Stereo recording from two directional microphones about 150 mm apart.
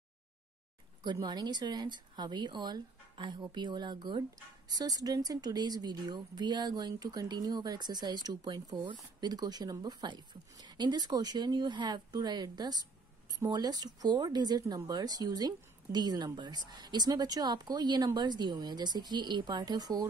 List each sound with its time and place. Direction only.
1.0 s a woman's voice: 30° right (ahead or behind)